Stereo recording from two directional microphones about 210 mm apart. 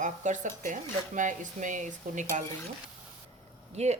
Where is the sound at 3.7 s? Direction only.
30° right (ahead or behind).